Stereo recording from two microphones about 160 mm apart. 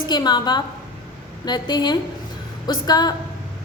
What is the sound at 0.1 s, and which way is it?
A woman's voice, 25° left (ahead or behind).